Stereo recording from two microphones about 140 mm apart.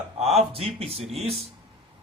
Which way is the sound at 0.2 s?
50° right (ahead or behind).